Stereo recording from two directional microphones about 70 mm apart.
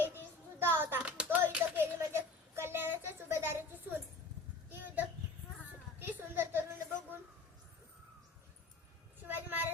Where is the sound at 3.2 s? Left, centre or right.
Right.